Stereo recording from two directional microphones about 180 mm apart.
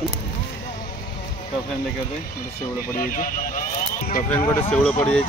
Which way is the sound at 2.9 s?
50° left (ahead or behind).